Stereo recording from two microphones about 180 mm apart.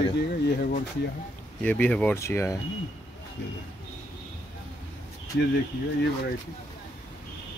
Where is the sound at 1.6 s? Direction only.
10° left (ahead or behind).